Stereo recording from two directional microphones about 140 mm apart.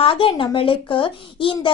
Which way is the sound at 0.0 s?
40° left (ahead or behind).